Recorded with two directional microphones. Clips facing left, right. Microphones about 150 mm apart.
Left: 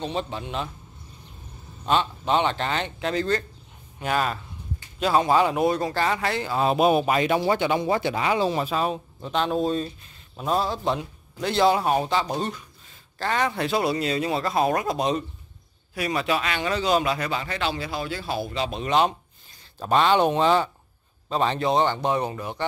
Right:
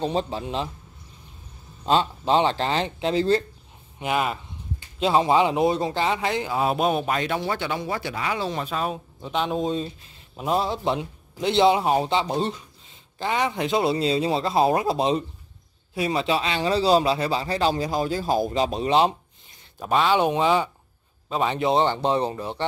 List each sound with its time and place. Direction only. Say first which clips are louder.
0.0 s speech: right 4 dB; 35° right (ahead or behind)
1.9 s a man's voice: right 2 dB; 30° right (ahead or behind)
4.0 s speech: even; 15° right (ahead or behind)
4.9 s a sound: right 1 dB; 25° right (ahead or behind)
5.3 s a man's voice: right 1 dB; 20° right (ahead or behind)
6.7 s speech: left 6 dB; 5° left (ahead or behind); by 8.5 s 20° left (ahead or behind)
8.5 s speech: left 3 dB; 5° left (ahead or behind)
9.3 s a man's voice: left 1 dB; 10° right (ahead or behind); by 19.1 s 30° right (ahead or behind)
19.8 s a man's voice: left 1 dB; 5° right (ahead or behind)
21.5 s a man's voice: right 1 dB; 25° right (ahead or behind)